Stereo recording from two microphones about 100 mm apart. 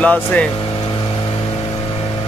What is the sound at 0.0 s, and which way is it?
Speech, 15° left (ahead or behind).